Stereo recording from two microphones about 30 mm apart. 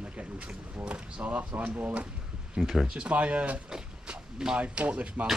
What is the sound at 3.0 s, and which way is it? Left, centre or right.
Speech, right.